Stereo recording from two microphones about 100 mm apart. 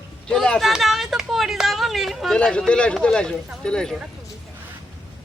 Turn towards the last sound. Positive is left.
turn(degrees=5)  # may be behind; listen again after turning